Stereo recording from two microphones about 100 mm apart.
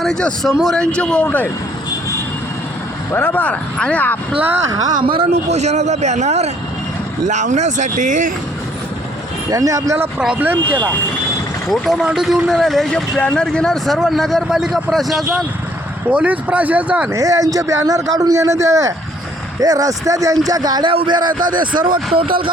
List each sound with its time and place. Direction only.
0.0 s speech: 5° left (ahead or behind)
0.8 s speech: 10° left (ahead or behind)
3.1 s speech: 20° left (ahead or behind)
4.4 s speech: 20° right (ahead or behind)
4.7 s a man's voice: 40° right (ahead or behind)
5.0 s speech: 65° right (ahead or behind); by 5.7 s 90° right
9.5 s a man's voice: 35° right (ahead or behind)
10.2 s speech: 10° right (ahead or behind)
11.7 s speech: 5° right (ahead or behind)
16.0 s speech: 15° right (ahead or behind)
17.1 s a man's voice: 35° right (ahead or behind); by 22.4 s 65° right (ahead or behind)